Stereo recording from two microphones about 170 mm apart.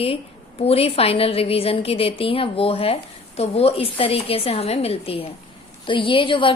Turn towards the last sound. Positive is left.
turn(degrees=30)  # may be behind; listen again after turning